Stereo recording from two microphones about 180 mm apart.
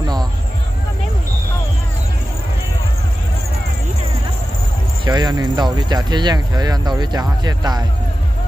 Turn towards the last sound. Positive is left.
turn(degrees=-20)  # may be behind; listen again after turning